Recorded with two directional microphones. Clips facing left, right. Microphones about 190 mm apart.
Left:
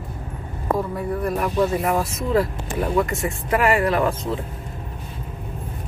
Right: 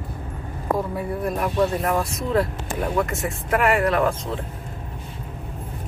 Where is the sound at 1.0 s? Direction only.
Centre (ahead or behind).